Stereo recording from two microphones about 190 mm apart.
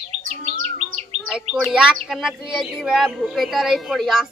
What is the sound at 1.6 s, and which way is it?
Speech, 5° right (ahead or behind).